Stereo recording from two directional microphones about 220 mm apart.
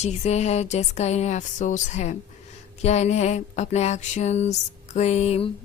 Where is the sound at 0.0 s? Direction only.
30° left (ahead or behind).